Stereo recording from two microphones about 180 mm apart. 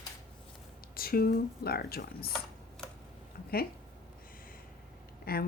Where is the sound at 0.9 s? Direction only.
55° left (ahead or behind).